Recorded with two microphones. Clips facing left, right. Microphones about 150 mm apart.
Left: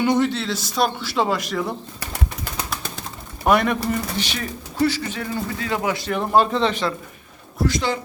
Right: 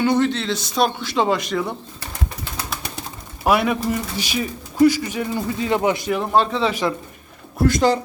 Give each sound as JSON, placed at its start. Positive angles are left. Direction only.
{"t": 0.0, "sound": "speech", "side_deg": 10}
{"t": 3.4, "sound": "speech", "side_deg": -5}
{"t": 6.1, "sound": "speech", "side_deg": 0}
{"t": 7.6, "sound": "speech", "side_deg": -45}